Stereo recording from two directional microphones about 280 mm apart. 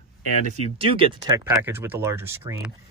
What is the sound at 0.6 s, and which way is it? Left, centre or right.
Speech, centre.